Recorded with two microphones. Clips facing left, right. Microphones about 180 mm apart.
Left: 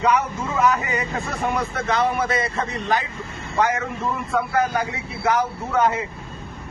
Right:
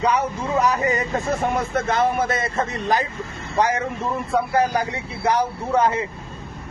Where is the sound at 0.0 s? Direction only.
30° right (ahead or behind).